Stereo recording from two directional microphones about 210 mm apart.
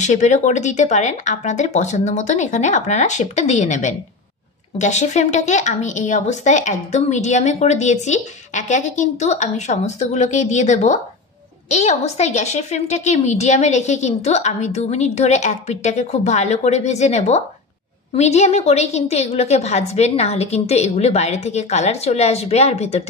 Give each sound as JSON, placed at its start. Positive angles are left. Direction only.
{"t": 0.0, "sound": "a woman's voice", "side_deg": 35}